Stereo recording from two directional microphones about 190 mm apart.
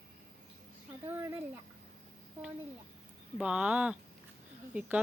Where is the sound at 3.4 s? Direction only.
5° right (ahead or behind).